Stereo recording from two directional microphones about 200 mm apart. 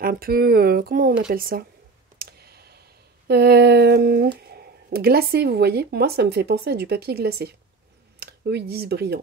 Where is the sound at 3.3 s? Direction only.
55° right (ahead or behind).